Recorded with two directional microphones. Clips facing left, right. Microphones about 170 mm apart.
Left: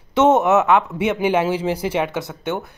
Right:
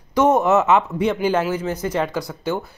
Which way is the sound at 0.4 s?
Centre (ahead or behind).